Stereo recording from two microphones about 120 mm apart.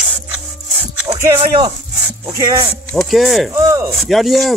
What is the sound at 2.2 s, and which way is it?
Speech, 25° right (ahead or behind).